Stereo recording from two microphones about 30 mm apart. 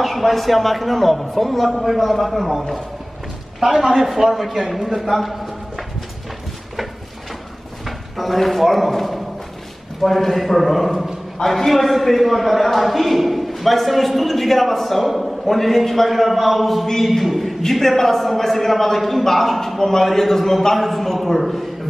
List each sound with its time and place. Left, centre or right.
0.0 s a man's voice: centre
3.6 s a man's voice: centre
7.8 s a man's voice: centre
16.8 s a man's voice: centre
17.2 s a man's voice: centre
17.6 s a man's voice: centre
21.4 s a man's voice: centre